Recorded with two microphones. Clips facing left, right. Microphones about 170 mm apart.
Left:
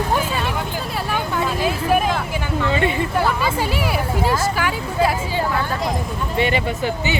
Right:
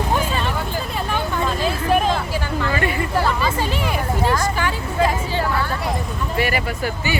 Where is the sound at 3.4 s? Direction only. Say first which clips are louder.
Left 1 dB; 10° left (ahead or behind).